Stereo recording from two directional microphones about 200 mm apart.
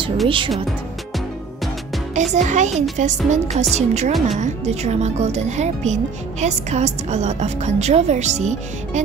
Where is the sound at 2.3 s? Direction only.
35° right (ahead or behind).